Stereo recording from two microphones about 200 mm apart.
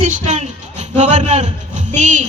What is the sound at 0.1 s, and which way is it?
A man's voice, 35° right (ahead or behind).